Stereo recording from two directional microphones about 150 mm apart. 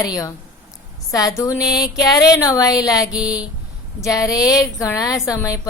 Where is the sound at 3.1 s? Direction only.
5° right (ahead or behind).